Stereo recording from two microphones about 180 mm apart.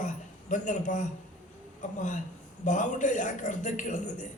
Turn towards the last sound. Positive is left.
turn(degrees=45)  # may be behind; listen again after turning